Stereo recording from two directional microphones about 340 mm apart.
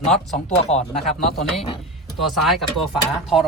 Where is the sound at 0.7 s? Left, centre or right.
Centre.